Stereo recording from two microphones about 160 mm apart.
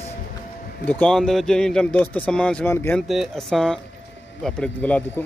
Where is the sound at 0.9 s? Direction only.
5° left (ahead or behind).